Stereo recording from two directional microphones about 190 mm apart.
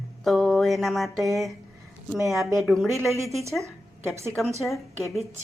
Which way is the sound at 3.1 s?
15° right (ahead or behind).